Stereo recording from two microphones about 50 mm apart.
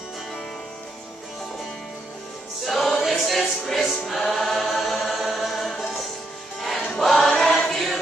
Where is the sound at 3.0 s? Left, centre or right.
Centre.